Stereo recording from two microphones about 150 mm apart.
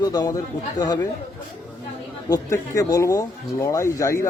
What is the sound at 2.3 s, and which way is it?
Speech, 20° left (ahead or behind).